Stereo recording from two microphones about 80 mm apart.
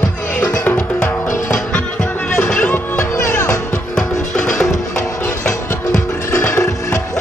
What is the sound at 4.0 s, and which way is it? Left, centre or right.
Music, centre.